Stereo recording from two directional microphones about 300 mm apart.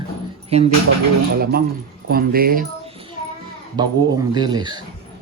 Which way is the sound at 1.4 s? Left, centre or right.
Right.